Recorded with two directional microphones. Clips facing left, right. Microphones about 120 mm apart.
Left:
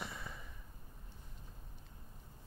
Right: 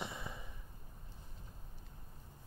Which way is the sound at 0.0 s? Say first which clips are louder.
Right 2 dB; 20° right (ahead or behind).